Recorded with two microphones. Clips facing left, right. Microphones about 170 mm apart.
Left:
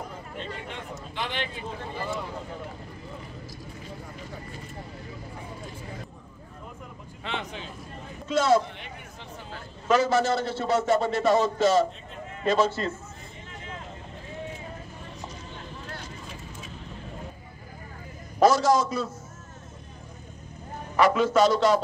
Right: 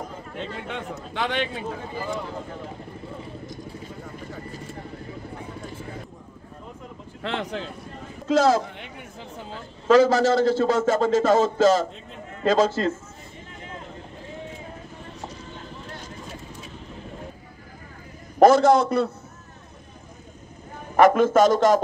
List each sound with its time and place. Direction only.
0.7 s a man's voice: 80° right
7.2 s a man's voice: 80° right
9.8 s a man's voice: 90° right
18.4 s a man's voice: 55° right (ahead or behind)
20.9 s a man's voice: 50° right (ahead or behind)